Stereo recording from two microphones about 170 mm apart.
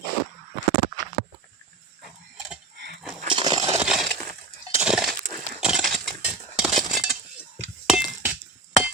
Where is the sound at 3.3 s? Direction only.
25° right (ahead or behind).